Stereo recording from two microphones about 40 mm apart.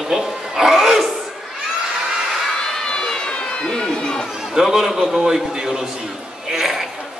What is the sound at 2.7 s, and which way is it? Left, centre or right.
Crowd, centre.